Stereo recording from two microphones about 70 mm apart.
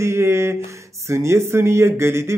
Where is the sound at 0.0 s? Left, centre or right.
Right.